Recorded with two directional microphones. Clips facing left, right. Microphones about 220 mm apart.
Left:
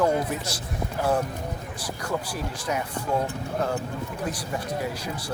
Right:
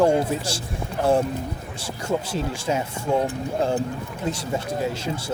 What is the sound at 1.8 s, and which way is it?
Speech, 25° right (ahead or behind).